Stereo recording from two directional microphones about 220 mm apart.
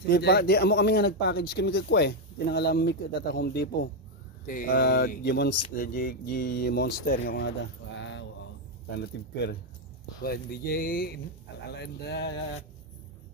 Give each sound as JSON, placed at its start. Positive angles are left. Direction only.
{"t": 0.1, "sound": "speech", "side_deg": 45}
{"t": 8.0, "sound": "mantra", "side_deg": 55}
{"t": 8.9, "sound": "speech", "side_deg": 50}